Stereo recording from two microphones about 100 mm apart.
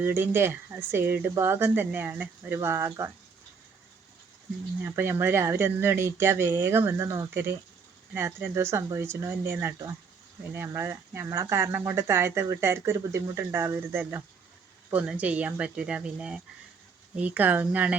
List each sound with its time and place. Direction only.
0.0 s speech: 20° right (ahead or behind)
4.8 s speech: 20° right (ahead or behind)